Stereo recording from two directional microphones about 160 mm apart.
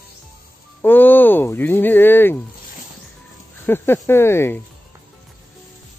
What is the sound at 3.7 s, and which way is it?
Speech, 15° left (ahead or behind).